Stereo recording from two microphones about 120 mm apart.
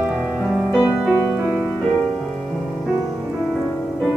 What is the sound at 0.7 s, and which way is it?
Music, 10° right (ahead or behind).